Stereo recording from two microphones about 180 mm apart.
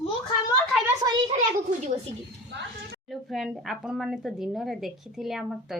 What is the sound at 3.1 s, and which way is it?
Speech, centre (ahead or behind).